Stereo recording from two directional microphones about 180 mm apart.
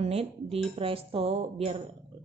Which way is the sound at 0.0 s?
35° right (ahead or behind).